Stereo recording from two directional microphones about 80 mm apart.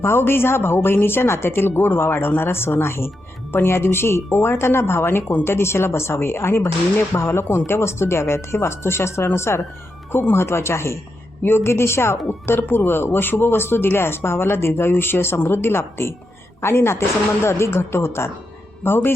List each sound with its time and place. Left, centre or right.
0.0 s a woman's voice: left